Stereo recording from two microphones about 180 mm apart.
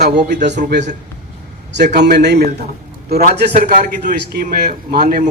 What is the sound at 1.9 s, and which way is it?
A man's voice, 65° right (ahead or behind).